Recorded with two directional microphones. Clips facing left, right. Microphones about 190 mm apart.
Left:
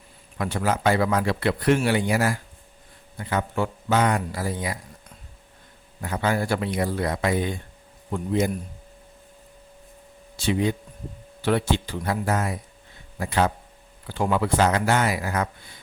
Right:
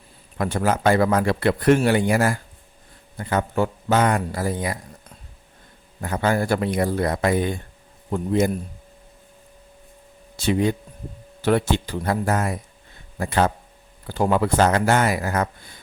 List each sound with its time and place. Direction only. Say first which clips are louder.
0.3 s speech: right 3 dB; 45° right (ahead or behind)
6.0 s speech: right 3 dB; 45° right (ahead or behind)
10.3 s speech: right 3 dB; 45° right (ahead or behind)